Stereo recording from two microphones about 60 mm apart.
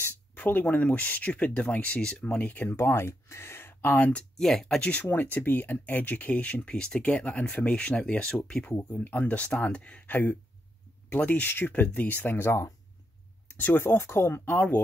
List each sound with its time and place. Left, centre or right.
0.4 s speech: left
2.7 s speech: left
4.4 s speech: centre
4.7 s speech: left
8.7 s speech: left
9.2 s speech: left
11.1 s speech: left
13.8 s speech: left